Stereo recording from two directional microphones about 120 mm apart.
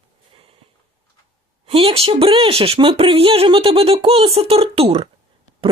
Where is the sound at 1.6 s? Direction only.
55° right (ahead or behind).